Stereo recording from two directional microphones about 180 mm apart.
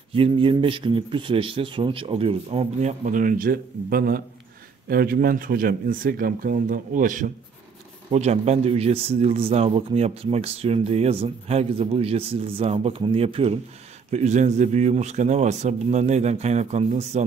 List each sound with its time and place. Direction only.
0.1 s a man's voice: 30° right (ahead or behind); by 7.2 s 45° right (ahead or behind)
8.1 s speech: 35° right (ahead or behind)